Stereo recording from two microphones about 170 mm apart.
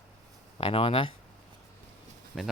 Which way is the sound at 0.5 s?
30° left (ahead or behind).